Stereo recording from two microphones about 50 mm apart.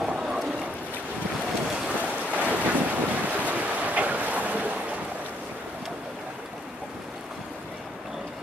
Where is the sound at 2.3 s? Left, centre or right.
Right.